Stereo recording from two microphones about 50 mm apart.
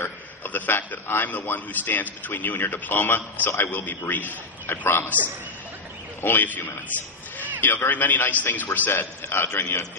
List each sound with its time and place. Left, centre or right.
0.0 s a sound: left
1.0 s a man's voice: left
6.2 s a man's voice: left